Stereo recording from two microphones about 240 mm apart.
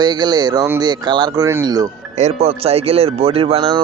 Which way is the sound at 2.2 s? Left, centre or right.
Right.